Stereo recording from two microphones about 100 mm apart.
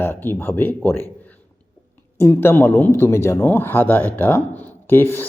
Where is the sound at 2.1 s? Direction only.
25° left (ahead or behind).